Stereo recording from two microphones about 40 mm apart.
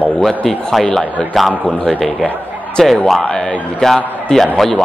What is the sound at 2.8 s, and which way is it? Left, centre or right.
A man's voice, centre.